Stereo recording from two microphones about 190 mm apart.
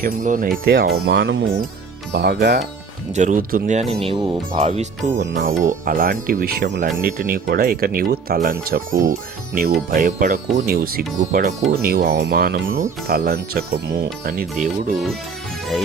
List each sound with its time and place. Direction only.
0.0 s speech: 45° right (ahead or behind)
3.2 s speech: 40° right (ahead or behind)
4.0 s speech: 25° right (ahead or behind)
5.2 s speech: 50° right (ahead or behind)
7.0 s speech: 50° right (ahead or behind)